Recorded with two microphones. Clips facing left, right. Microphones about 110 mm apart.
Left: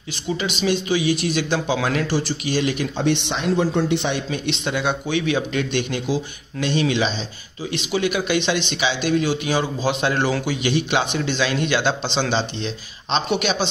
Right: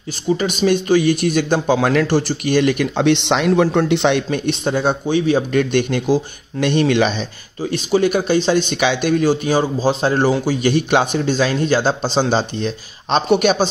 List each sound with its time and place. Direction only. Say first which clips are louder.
0.4 s a man's voice: right 3 dB; 50° right (ahead or behind)
3.0 s speech: right 6 dB; 80° right
4.3 s a man's voice: right 5 dB; 45° right (ahead or behind)
5.5 s a man's voice: right 6 dB; 50° right (ahead or behind)
7.7 s a man's voice: right 6 dB; 45° right (ahead or behind)